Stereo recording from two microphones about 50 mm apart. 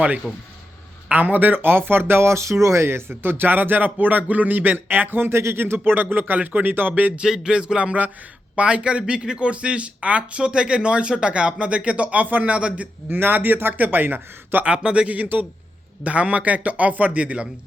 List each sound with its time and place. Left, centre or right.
0.2 s speech: centre
1.1 s speech: right
2.8 s speech: right
7.2 s a sound: centre
8.5 s speech: right
12.5 s speech: right
13.1 s speech: right
14.6 s speech: right